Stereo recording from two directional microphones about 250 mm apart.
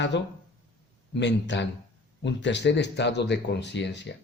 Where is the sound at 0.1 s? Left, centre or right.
Left.